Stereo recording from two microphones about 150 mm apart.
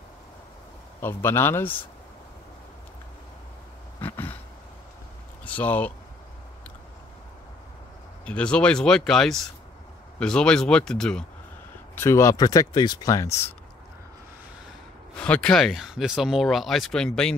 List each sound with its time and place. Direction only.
1.0 s speech: 15° left (ahead or behind)
4.0 s a sound: 15° left (ahead or behind)
5.4 s speech: 10° left (ahead or behind)
8.3 s speech: 5° left (ahead or behind)
11.9 s speech: 15° left (ahead or behind)
15.1 s speech: 10° left (ahead or behind)